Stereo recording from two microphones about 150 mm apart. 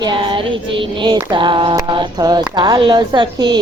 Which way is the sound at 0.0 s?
35° right (ahead or behind).